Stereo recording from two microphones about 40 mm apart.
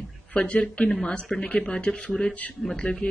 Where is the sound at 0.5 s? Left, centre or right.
Left.